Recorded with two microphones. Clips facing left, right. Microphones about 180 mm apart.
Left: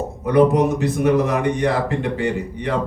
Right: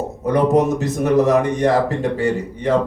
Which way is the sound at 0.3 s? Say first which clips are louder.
Even; 40° right (ahead or behind).